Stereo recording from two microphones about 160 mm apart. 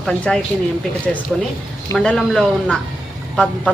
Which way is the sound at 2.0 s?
5° left (ahead or behind).